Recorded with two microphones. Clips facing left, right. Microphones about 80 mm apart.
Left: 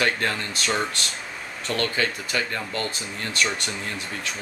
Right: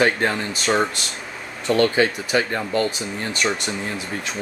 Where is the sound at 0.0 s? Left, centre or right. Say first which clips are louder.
Right 5 dB; centre.